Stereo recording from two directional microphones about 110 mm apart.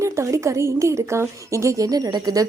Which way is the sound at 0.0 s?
25° right (ahead or behind).